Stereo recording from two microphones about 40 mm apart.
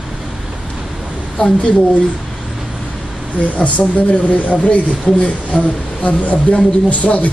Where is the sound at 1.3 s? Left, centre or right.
Left.